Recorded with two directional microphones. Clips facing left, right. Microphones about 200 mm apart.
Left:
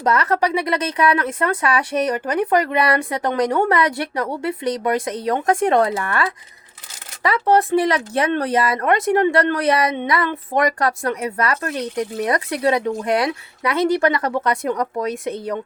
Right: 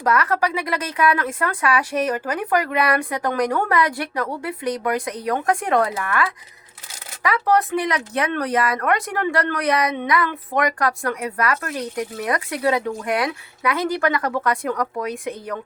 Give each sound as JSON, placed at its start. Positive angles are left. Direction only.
{"t": 0.0, "sound": "speech", "side_deg": 20}